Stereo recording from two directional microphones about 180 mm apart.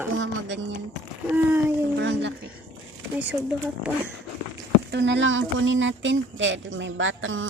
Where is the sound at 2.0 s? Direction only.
80° right.